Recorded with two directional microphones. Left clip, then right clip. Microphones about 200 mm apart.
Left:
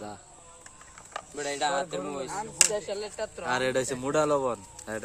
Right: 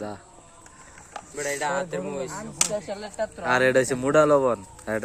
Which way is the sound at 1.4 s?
45° left (ahead or behind).